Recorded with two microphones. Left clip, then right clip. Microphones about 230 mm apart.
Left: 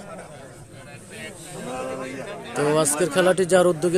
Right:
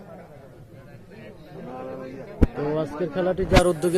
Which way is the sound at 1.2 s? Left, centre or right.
Left.